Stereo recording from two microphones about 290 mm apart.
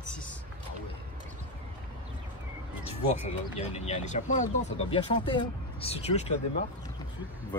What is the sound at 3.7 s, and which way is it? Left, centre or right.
Speech, left.